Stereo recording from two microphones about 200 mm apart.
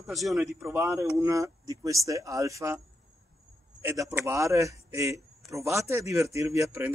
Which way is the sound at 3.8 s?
15° right (ahead or behind).